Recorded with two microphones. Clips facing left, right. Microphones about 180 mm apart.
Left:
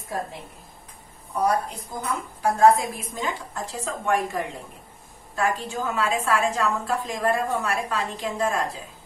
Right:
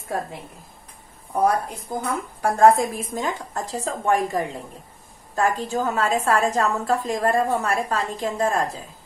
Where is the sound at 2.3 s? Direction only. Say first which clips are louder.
Right 2 dB; 55° right (ahead or behind); by 4.1 s 40° right (ahead or behind).